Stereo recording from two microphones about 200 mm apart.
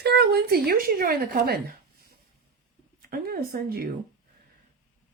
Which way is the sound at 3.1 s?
50° right (ahead or behind).